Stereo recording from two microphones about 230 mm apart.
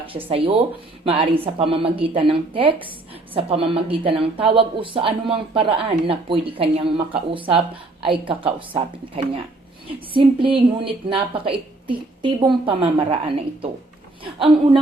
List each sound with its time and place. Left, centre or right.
0.1 s speech: right